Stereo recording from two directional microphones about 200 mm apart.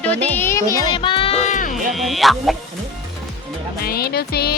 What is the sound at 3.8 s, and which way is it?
Speech, 50° left (ahead or behind).